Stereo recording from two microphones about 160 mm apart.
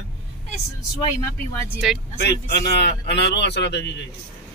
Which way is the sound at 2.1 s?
90° left.